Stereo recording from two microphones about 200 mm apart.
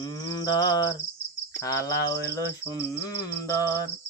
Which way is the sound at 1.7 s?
15° left (ahead or behind).